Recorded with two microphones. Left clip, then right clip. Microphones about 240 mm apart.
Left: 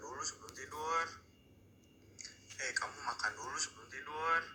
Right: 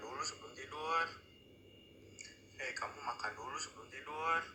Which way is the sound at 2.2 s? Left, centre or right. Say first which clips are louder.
Left 2 dB; left.